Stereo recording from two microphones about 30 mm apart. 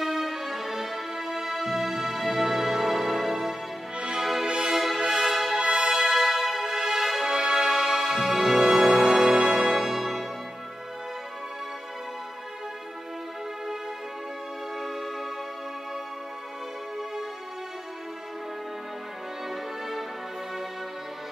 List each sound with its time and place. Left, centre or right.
0.0 s music: centre
4.5 s music: right
4.7 s music: centre
7.2 s music: right
9.5 s music: centre
19.5 s music: centre